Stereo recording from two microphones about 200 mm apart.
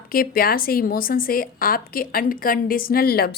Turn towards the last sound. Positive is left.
turn(degrees=50)  # may be behind; listen again after turning